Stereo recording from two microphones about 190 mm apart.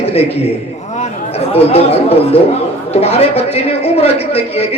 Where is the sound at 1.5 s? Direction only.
30° left (ahead or behind).